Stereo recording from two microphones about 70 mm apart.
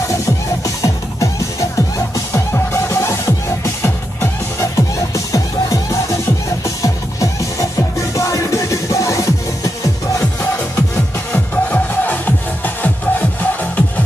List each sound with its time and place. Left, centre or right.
0.7 s music: left
2.5 s music: left
11.3 s music: left